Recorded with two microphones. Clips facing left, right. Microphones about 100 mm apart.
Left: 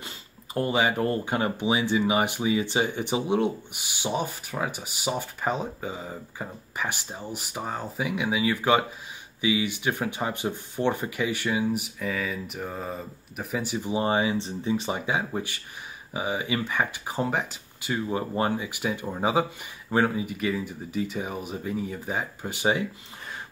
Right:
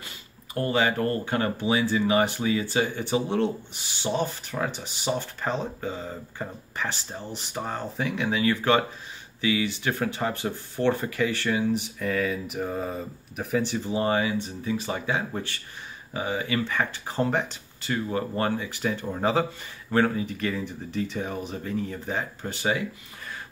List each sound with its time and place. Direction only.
0.6 s speech: 15° left (ahead or behind)